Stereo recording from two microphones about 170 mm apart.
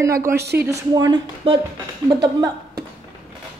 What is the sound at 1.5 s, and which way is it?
Speech, 35° right (ahead or behind).